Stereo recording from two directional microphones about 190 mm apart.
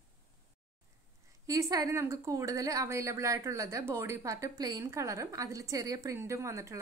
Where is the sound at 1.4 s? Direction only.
15° right (ahead or behind).